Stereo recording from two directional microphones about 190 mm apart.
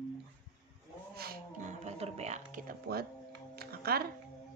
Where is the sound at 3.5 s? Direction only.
55° right (ahead or behind).